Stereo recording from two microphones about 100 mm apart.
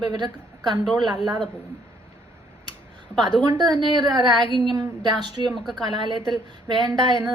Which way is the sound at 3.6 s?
50° right (ahead or behind).